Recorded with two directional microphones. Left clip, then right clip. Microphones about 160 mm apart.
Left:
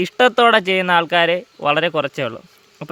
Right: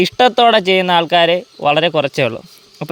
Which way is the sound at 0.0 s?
15° right (ahead or behind).